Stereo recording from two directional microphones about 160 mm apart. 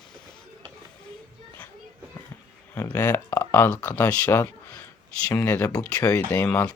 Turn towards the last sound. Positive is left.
turn(degrees=15)  # may be behind; listen again after turning